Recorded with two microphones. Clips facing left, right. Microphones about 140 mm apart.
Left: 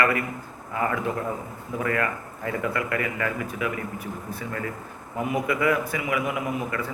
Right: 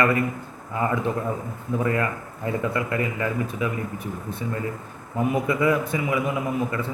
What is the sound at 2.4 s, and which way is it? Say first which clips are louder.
A man's voice: right 2 dB; 25° right (ahead or behind).